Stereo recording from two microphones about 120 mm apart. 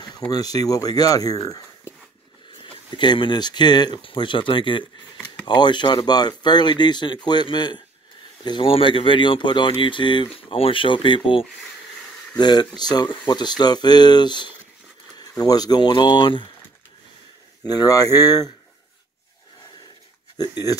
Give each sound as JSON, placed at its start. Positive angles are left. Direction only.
{"t": 0.3, "sound": "speech", "side_deg": 30}
{"t": 2.6, "sound": "speech", "side_deg": 40}
{"t": 17.6, "sound": "speech", "side_deg": 30}
{"t": 20.3, "sound": "speech", "side_deg": 35}